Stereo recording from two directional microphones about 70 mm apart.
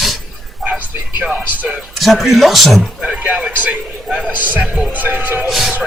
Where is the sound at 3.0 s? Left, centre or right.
Right.